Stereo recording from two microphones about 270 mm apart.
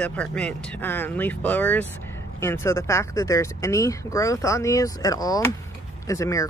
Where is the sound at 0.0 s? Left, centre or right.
Centre.